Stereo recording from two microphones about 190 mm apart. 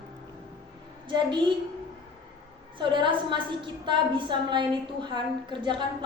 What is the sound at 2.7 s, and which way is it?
A woman's voice, 25° right (ahead or behind).